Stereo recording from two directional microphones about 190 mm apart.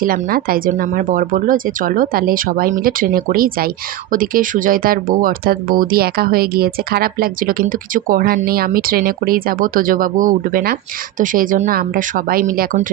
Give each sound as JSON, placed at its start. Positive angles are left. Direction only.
{"t": 0.0, "sound": "speech", "side_deg": -50}